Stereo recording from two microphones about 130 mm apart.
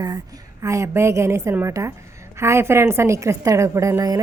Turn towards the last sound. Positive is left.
turn(degrees=-25)  # may be behind; listen again after turning